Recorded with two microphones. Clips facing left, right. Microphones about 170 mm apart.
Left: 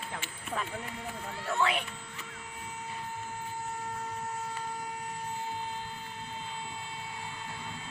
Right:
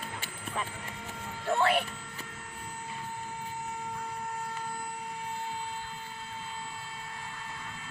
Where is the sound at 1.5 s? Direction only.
40° right (ahead or behind).